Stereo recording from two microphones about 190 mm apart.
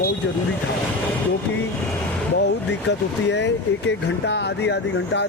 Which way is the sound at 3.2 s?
65° left (ahead or behind).